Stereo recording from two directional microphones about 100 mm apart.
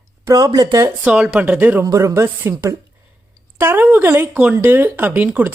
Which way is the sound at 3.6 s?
20° right (ahead or behind).